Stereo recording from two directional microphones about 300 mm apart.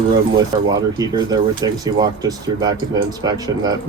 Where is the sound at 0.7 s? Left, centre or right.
Centre.